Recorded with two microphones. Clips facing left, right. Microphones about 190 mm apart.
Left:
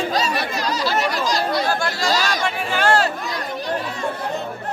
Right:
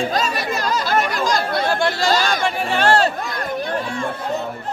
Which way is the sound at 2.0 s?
55° right (ahead or behind).